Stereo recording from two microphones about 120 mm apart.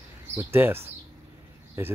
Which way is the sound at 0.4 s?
20° right (ahead or behind).